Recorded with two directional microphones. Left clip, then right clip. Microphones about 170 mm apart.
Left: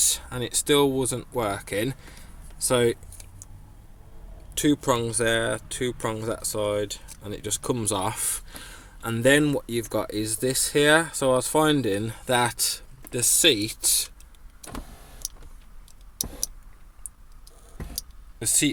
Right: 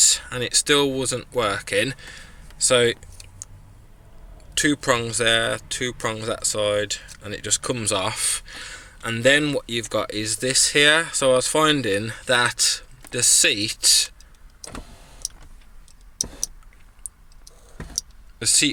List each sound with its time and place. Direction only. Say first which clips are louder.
0.0 s speech: right 7 dB; 10° left (ahead or behind)
4.5 s speech: right 3 dB; 5° left (ahead or behind)
12.1 s speech: right 4 dB; 25° left (ahead or behind)
13.1 s speech: right 2 dB; 10° left (ahead or behind)
18.3 s speech: right 5 dB; centre (ahead or behind)